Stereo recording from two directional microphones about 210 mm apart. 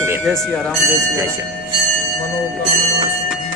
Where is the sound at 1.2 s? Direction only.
15° right (ahead or behind).